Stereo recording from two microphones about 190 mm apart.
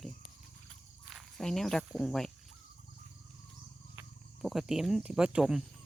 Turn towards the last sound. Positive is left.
turn(degrees=-5)  # may be behind; listen again after turning